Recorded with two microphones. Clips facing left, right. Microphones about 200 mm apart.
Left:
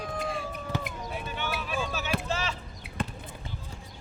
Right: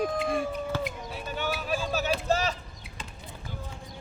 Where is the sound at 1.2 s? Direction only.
40° right (ahead or behind).